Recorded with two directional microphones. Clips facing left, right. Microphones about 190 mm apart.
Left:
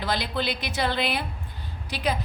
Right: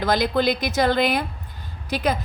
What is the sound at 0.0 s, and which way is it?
Speech, 45° right (ahead or behind).